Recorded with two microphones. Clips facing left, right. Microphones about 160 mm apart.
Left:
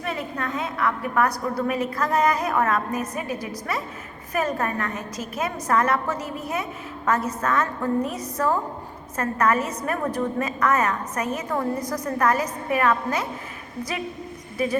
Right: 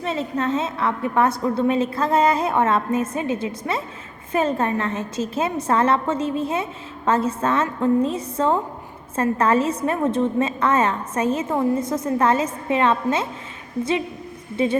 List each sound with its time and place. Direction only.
0.0 s a woman's voice: 25° right (ahead or behind)
14.5 s a woman's voice: 25° right (ahead or behind)